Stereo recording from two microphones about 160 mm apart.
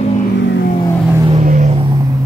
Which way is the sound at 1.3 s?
50° right (ahead or behind).